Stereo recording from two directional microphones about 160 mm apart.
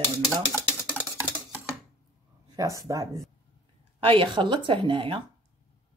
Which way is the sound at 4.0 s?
35° right (ahead or behind).